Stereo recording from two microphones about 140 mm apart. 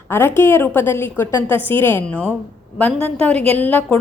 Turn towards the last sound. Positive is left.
turn(degrees=10)  # may be behind; listen again after turning